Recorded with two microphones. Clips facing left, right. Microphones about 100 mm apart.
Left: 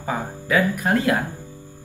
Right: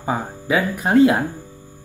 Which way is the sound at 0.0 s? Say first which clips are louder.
Right 3 dB; 20° right (ahead or behind).